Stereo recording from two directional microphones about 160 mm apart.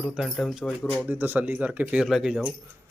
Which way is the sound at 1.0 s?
10° right (ahead or behind).